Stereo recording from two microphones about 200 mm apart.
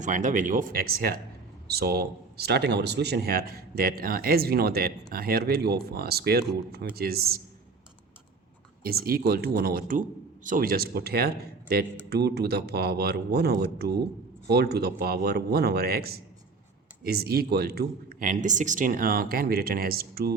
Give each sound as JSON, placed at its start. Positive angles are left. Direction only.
{"t": 0.0, "sound": "speech", "side_deg": -40}
{"t": 8.8, "sound": "speech", "side_deg": -50}